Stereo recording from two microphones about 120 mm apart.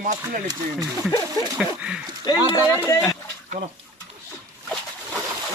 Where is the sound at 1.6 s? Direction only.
10° right (ahead or behind).